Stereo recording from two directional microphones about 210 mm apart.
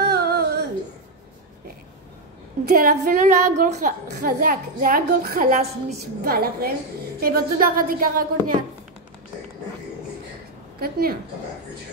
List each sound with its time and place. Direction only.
0.0 s a sound: 50° right (ahead or behind)
2.6 s a woman's voice: 45° right (ahead or behind)
6.2 s speech: 45° right (ahead or behind)
10.8 s speech: 45° right (ahead or behind)